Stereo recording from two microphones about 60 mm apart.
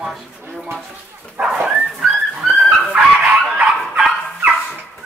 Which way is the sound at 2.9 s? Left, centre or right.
Centre.